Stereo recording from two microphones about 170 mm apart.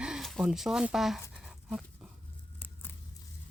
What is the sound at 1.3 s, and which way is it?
Dog, 5° right (ahead or behind).